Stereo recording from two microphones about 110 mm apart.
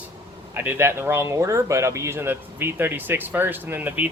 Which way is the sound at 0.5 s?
15° right (ahead or behind).